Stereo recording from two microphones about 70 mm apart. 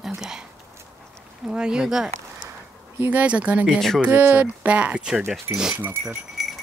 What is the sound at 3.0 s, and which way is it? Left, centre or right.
Speech, right.